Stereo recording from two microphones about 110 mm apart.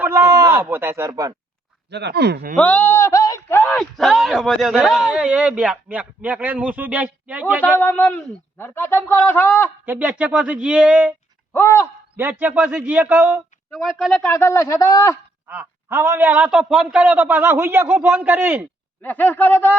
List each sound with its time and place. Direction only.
0.0 s a sound: 20° right (ahead or behind)
0.6 s speech: 20° right (ahead or behind)
2.6 s a man's voice: 15° left (ahead or behind)
3.7 s speech: 5° left (ahead or behind); by 7.8 s 15° right (ahead or behind)
7.8 s a man's voice: 15° left (ahead or behind)
9.8 s speech: 15° right (ahead or behind)
11.5 s a man's voice: 25° left (ahead or behind)
12.1 s speech: 20° right (ahead or behind)
13.7 s speech: centre (ahead or behind)
14.3 s a man's voice: 25° left (ahead or behind)
15.4 s speech: 15° right (ahead or behind)
19.0 s speech: 15° left (ahead or behind)